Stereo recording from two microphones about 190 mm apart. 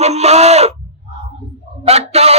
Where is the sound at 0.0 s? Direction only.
35° right (ahead or behind).